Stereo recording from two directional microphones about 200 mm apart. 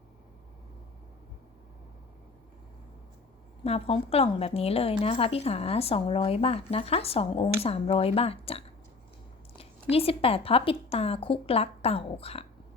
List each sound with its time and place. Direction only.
3.6 s a woman's voice: 30° left (ahead or behind)
9.9 s a woman's voice: 30° left (ahead or behind)